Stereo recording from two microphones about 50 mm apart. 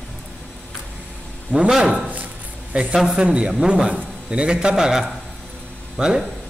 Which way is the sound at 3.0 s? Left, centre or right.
Centre.